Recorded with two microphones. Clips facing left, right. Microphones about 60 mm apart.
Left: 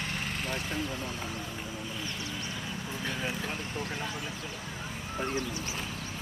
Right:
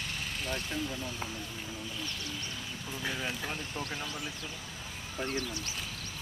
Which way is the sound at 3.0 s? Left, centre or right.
Centre.